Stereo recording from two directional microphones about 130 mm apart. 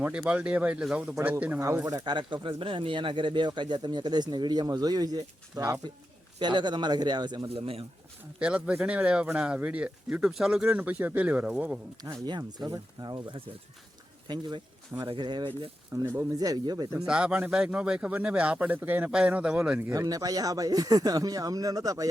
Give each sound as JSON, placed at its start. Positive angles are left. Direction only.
{"t": 0.3, "sound": "speech", "side_deg": -10}
{"t": 1.6, "sound": "speech", "side_deg": -25}
{"t": 7.4, "sound": "speech", "side_deg": -50}
{"t": 8.4, "sound": "speech", "side_deg": -10}
{"t": 12.2, "sound": "speech", "side_deg": -35}
{"t": 16.0, "sound": "speech", "side_deg": -25}
{"t": 17.1, "sound": "speech", "side_deg": -10}
{"t": 19.9, "sound": "speech", "side_deg": -25}